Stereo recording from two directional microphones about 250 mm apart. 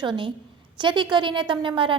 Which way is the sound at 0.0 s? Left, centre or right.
Centre.